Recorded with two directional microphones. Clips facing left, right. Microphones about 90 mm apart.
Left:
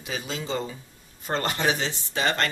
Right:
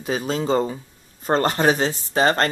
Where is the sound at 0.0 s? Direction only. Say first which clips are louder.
Right 9 dB; 40° right (ahead or behind).